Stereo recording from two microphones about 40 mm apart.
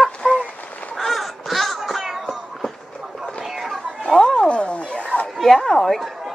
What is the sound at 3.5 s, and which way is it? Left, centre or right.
Music, centre.